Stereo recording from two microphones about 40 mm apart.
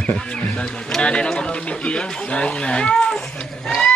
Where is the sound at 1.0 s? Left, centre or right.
Left.